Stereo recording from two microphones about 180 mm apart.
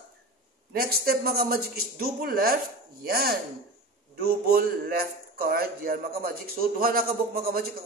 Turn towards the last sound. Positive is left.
turn(degrees=-55)  # may be behind; listen again after turning